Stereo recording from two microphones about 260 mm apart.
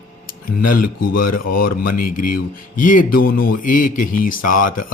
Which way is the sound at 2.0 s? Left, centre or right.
Left.